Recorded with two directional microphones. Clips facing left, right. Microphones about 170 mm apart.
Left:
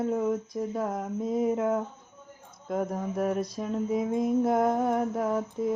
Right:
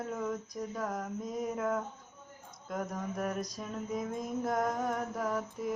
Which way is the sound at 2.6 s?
25° left (ahead or behind).